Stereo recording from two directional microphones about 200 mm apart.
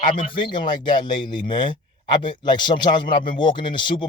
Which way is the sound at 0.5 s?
25° left (ahead or behind).